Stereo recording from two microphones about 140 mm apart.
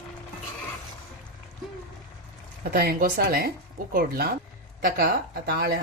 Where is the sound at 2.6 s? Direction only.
90° right.